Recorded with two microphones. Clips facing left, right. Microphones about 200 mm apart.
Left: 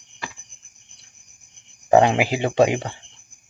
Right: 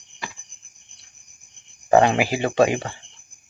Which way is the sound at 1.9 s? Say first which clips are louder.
Left 1 dB; 15° left (ahead or behind).